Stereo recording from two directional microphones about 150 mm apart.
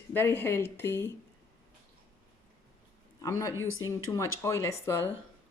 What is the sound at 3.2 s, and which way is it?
A man's voice, 20° left (ahead or behind).